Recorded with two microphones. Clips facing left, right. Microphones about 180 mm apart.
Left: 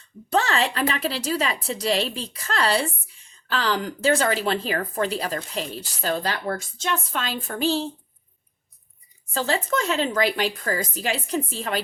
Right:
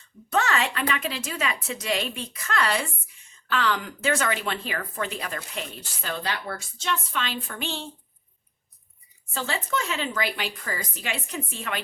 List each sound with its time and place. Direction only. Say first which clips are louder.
0.3 s a woman's voice: left 2 dB; 30° left (ahead or behind)
9.3 s a woman's voice: left 5 dB; 40° left (ahead or behind)